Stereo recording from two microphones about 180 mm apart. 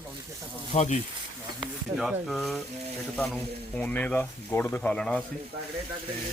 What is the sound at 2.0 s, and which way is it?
Speech, centre (ahead or behind).